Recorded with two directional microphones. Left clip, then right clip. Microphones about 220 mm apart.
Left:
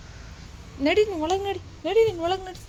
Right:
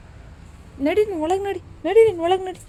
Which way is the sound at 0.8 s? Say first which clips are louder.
Right 2 dB; 10° right (ahead or behind).